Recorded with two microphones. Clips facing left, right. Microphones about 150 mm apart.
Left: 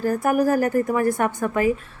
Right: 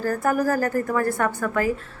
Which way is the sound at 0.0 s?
15° left (ahead or behind).